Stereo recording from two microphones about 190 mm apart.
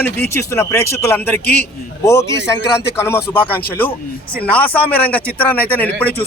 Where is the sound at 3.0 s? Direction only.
15° left (ahead or behind).